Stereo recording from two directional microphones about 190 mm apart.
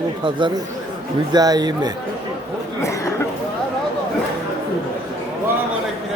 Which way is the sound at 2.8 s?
15° left (ahead or behind).